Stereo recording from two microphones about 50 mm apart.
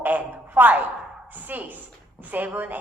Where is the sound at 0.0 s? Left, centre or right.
Right.